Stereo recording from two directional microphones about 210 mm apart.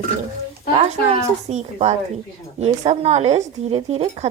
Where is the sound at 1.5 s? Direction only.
30° right (ahead or behind).